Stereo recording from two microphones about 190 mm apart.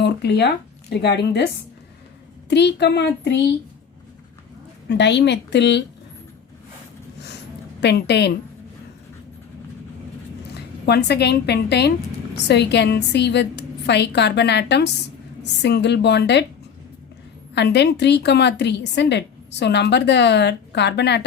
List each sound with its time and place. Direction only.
0.0 s speech: 60° left (ahead or behind)
2.5 s a woman's voice: 65° left (ahead or behind)
4.9 s a woman's voice: 65° left (ahead or behind)
7.8 s a woman's voice: 65° left (ahead or behind)
10.8 s a woman's voice: 60° left (ahead or behind)
17.5 s a woman's voice: 65° left (ahead or behind)